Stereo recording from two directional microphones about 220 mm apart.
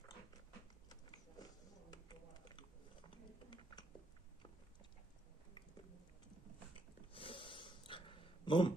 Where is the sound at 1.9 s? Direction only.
20° left (ahead or behind).